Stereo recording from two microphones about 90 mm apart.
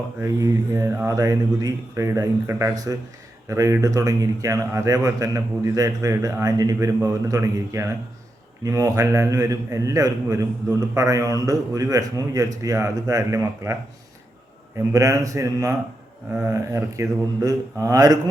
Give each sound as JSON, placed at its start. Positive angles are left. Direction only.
{"t": 0.2, "sound": "a man's voice", "side_deg": -35}
{"t": 14.8, "sound": "a man's voice", "side_deg": -40}